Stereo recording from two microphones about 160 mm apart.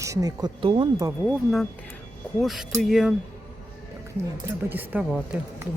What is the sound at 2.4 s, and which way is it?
Speech, centre (ahead or behind).